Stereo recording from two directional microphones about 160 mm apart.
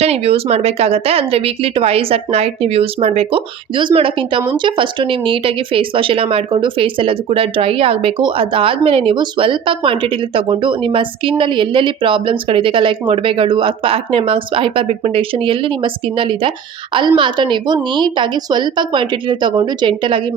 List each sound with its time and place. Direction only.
0.0 s speech: 40° right (ahead or behind)